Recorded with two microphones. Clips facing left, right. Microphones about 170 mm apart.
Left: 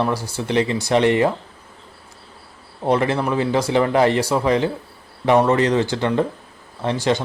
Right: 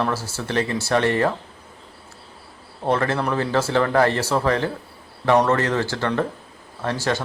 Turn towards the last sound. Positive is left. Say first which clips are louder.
# left 4 dB
turn(degrees=20)  # may be behind; listen again after turning